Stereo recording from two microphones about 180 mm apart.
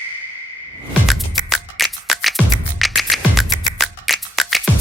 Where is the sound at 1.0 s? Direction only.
Centre (ahead or behind).